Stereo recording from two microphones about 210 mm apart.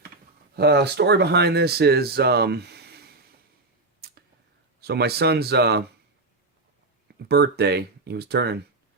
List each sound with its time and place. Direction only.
0.5 s speech: 50° right (ahead or behind)
4.8 s speech: 50° right (ahead or behind)
7.1 s speech: 50° right (ahead or behind)